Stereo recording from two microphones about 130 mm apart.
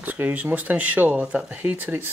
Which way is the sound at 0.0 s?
15° right (ahead or behind).